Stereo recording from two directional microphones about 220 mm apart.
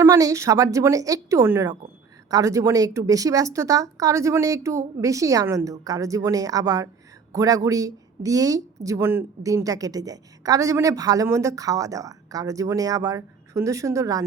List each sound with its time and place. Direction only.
0.0 s speech: 15° right (ahead or behind)